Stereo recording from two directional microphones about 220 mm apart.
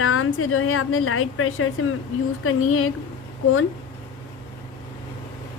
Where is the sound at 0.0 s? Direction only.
70° left (ahead or behind).